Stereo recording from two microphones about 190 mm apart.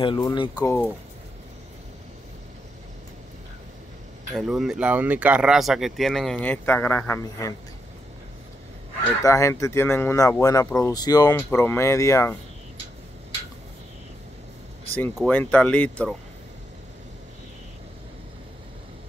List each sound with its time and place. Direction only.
0.0 s speech: 25° left (ahead or behind)
4.3 s speech: centre (ahead or behind)
9.2 s speech: 15° left (ahead or behind)
15.1 s speech: 5° left (ahead or behind)